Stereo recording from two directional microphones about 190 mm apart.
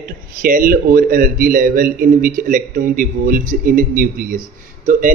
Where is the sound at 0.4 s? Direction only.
45° right (ahead or behind).